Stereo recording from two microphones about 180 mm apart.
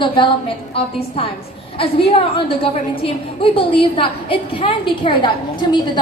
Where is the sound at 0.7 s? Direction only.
30° left (ahead or behind).